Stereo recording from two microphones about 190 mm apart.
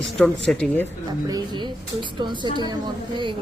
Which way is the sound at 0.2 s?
5° left (ahead or behind).